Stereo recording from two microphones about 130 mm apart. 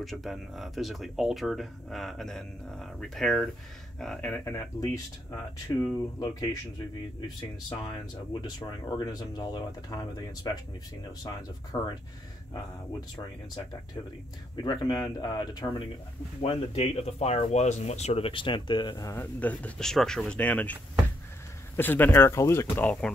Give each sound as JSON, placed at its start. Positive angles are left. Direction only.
{"t": 0.0, "sound": "speech", "side_deg": 0}
{"t": 4.5, "sound": "speech", "side_deg": 25}
{"t": 7.8, "sound": "speech", "side_deg": 30}
{"t": 14.6, "sound": "speech", "side_deg": 35}
{"t": 16.3, "sound": "speech", "side_deg": 55}
{"t": 19.1, "sound": "speech", "side_deg": 10}
{"t": 21.7, "sound": "speech", "side_deg": 15}
{"t": 22.8, "sound": "speech", "side_deg": 10}